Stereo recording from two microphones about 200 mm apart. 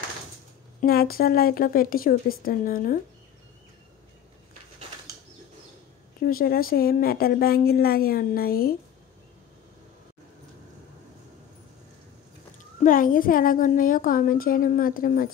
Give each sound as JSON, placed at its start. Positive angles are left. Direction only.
{"t": 0.7, "sound": "a woman's voice", "side_deg": 50}
{"t": 6.2, "sound": "a woman's voice", "side_deg": 45}
{"t": 12.8, "sound": "a woman's voice", "side_deg": 45}